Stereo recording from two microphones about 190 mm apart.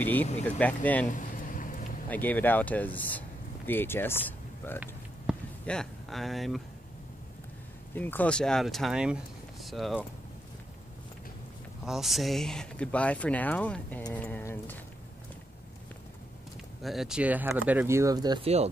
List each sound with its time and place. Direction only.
0.0 s speech: 10° left (ahead or behind)
1.1 s a sound: 45° left (ahead or behind)
2.0 s speech: 10° left (ahead or behind)
5.3 s a sound: 5° right (ahead or behind)
5.7 s speech: centre (ahead or behind)
7.9 s speech: 10° left (ahead or behind)
11.8 s speech: centre (ahead or behind)
16.8 s speech: centre (ahead or behind); by 18.5 s 20° right (ahead or behind)